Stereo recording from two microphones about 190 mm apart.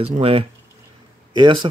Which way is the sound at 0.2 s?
30° right (ahead or behind).